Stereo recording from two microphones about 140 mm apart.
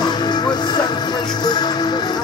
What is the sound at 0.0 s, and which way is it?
Music, 30° left (ahead or behind).